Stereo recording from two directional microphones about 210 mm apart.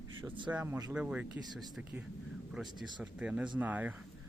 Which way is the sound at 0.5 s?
10° right (ahead or behind).